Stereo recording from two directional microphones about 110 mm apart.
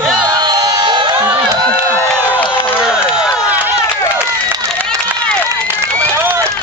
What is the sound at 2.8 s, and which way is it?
Crowd, 5° right (ahead or behind).